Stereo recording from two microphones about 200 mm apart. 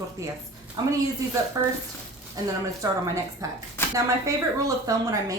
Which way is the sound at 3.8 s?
10° left (ahead or behind).